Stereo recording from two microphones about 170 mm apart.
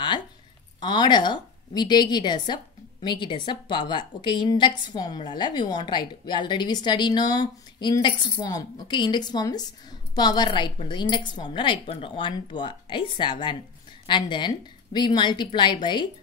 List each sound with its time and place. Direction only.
0.7 s a woman's voice: 25° left (ahead or behind)